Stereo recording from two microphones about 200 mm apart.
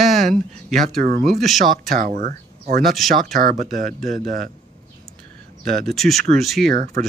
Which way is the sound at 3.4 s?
45° right (ahead or behind).